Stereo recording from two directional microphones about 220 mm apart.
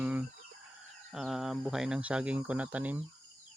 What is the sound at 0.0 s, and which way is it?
Chicken, 5° right (ahead or behind).